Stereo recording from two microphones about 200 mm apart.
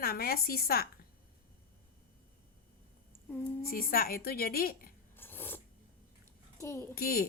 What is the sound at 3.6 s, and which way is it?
A woman's voice, 50° left (ahead or behind).